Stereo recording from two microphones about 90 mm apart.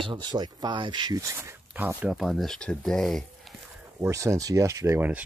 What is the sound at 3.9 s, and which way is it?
Speech, 35° right (ahead or behind).